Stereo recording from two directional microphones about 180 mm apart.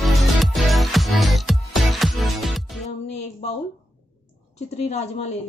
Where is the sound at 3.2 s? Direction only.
35° left (ahead or behind).